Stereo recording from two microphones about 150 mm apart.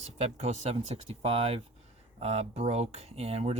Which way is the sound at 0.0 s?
45° right (ahead or behind).